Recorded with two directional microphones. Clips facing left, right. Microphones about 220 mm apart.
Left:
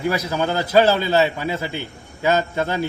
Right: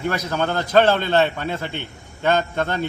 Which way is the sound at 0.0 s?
10° left (ahead or behind).